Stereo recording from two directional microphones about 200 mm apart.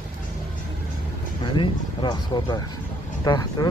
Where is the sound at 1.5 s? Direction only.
25° left (ahead or behind).